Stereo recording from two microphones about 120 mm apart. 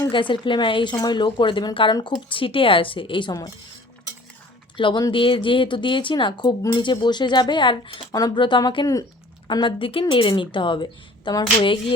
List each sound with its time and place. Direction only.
0.1 s speech: 45° left (ahead or behind)
4.8 s speech: 45° left (ahead or behind)